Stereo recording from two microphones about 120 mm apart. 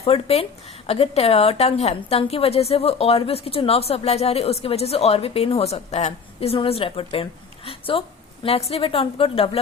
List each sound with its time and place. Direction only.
0.0 s a woman's voice: 60° left (ahead or behind)